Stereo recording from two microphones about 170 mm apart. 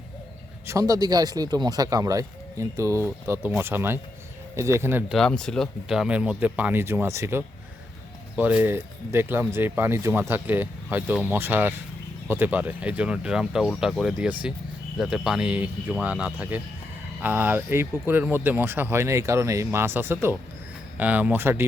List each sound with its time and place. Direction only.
0.7 s speech: 20° right (ahead or behind)
5.1 s speech: 5° left (ahead or behind); by 21.7 s 15° right (ahead or behind)